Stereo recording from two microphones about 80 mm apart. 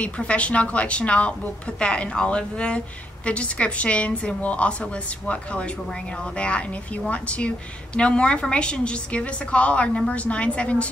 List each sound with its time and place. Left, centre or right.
0.0 s a woman's voice: centre